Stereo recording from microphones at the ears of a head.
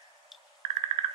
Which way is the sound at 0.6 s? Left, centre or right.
Right.